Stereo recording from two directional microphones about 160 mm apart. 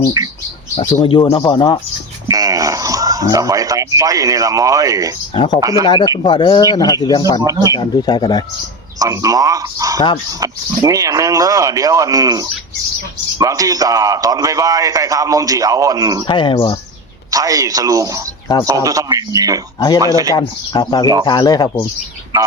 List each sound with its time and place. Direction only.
0.2 s bird: 25° right (ahead or behind)
1.0 s speech: 30° left (ahead or behind)
2.2 s speech: 20° right (ahead or behind)
5.3 s speech: 30° left (ahead or behind)
5.5 s speech: 20° right (ahead or behind)
5.8 s speech: 30° left (ahead or behind)
7.4 s speech: 20° right (ahead or behind)
7.7 s speech: 25° left (ahead or behind)
9.0 s speech: 20° right (ahead or behind)
16.2 s speech: 30° left (ahead or behind)
17.3 s speech: 20° right (ahead or behind)
20.3 s speech: 25° left (ahead or behind)